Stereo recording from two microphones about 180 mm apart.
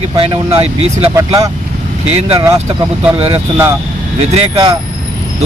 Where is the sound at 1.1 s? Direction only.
20° right (ahead or behind).